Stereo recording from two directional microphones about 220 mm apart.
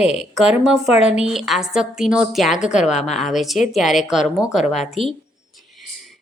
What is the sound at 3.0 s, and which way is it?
A woman's voice, centre (ahead or behind).